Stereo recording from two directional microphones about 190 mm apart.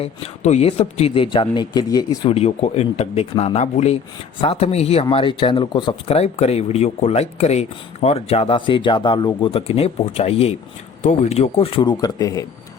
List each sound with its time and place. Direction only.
0.0 s a man's voice: 35° left (ahead or behind); by 12.5 s 20° left (ahead or behind)